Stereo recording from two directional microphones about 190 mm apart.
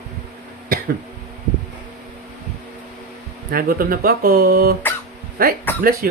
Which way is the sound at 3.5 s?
50° right (ahead or behind).